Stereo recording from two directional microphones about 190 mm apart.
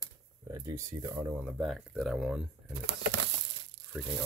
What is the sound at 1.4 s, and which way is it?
Speech, 5° right (ahead or behind).